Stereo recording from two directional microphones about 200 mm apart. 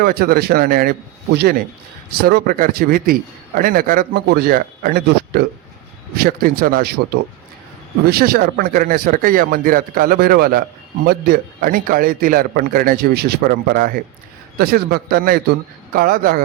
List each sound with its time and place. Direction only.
0.0 s a man's voice: 50° right (ahead or behind)